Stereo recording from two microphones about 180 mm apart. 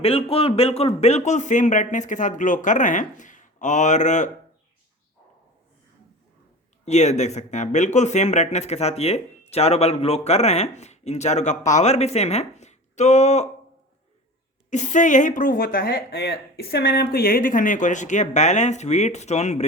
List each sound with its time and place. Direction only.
0.0 s speech: 30° left (ahead or behind)
6.8 s speech: 40° left (ahead or behind)
14.7 s speech: 45° left (ahead or behind)